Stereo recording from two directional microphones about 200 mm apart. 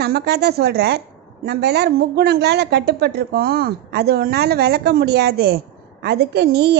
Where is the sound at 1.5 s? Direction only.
55° right (ahead or behind).